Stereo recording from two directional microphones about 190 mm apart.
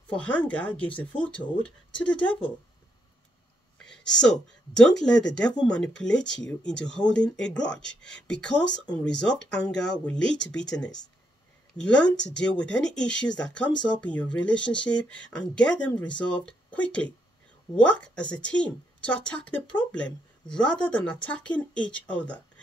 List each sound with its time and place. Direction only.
0.1 s speech: 5° left (ahead or behind)
3.7 s speech: 5° left (ahead or behind)